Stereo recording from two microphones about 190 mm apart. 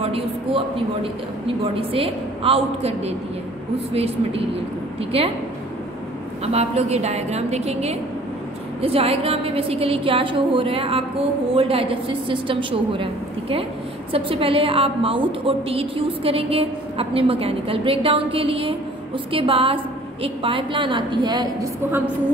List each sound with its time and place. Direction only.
0.0 s a man's voice: 30° right (ahead or behind)
1.8 s a woman's voice: 30° right (ahead or behind)
6.4 s a woman's voice: 35° right (ahead or behind)